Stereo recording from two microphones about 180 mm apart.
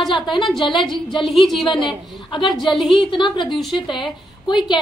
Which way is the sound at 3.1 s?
25° left (ahead or behind).